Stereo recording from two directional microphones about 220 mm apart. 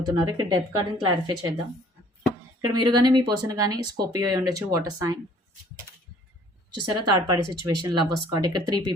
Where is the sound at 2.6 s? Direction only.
20° right (ahead or behind).